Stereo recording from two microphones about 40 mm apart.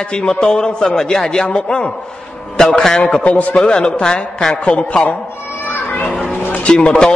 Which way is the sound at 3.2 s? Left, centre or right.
Left.